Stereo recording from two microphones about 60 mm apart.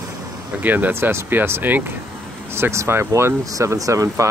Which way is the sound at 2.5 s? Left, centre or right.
Right.